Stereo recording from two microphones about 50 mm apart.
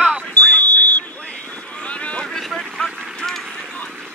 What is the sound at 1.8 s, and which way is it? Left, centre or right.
Boat, left.